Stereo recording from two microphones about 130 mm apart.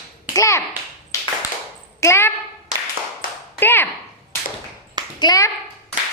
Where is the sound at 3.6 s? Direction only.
15° left (ahead or behind).